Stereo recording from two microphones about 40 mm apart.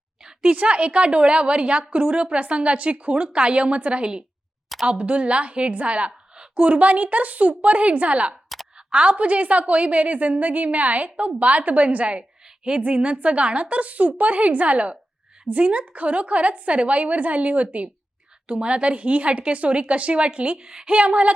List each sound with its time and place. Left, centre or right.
0.4 s a woman's voice: right